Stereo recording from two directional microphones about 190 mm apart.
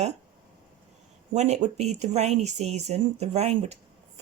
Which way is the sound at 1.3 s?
35° right (ahead or behind).